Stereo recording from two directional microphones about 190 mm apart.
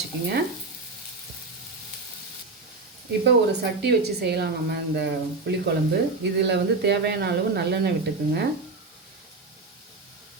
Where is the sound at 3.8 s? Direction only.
60° right (ahead or behind).